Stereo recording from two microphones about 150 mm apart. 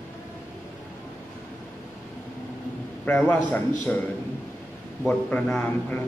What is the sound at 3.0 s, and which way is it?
A man's voice, 10° left (ahead or behind).